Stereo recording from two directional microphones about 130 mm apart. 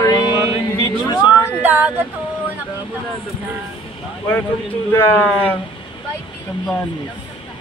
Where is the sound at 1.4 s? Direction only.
15° right (ahead or behind).